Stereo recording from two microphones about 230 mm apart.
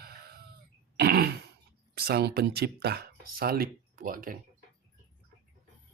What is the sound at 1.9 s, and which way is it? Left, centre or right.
Speech, right.